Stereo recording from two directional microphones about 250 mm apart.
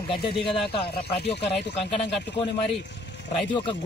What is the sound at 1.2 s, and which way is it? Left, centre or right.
Speech, left.